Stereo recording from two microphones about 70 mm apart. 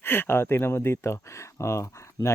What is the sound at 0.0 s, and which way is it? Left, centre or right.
Speech, left.